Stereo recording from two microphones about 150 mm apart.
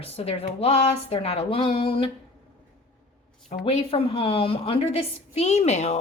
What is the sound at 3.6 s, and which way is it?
A woman's voice, 40° left (ahead or behind).